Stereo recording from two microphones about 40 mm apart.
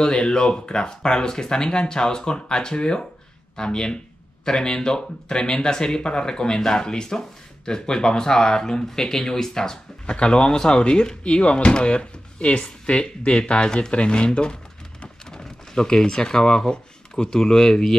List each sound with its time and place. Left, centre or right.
0.0 s speech: left